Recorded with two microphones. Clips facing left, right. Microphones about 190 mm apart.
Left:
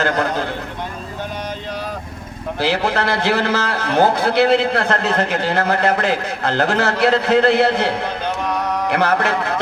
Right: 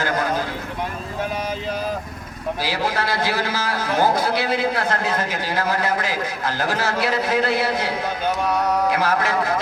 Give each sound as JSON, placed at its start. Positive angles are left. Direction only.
{"t": 0.0, "sound": "a man's voice", "side_deg": 70}
{"t": 2.6, "sound": "a man's voice", "side_deg": 65}
{"t": 8.9, "sound": "a sound", "side_deg": 65}